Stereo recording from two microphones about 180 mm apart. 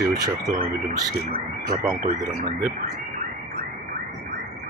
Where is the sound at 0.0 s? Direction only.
20° right (ahead or behind).